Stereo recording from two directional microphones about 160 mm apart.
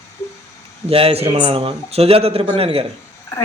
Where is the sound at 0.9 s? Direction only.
35° right (ahead or behind).